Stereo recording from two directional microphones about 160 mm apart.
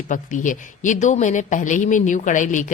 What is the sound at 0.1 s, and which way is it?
Speech, 55° left (ahead or behind).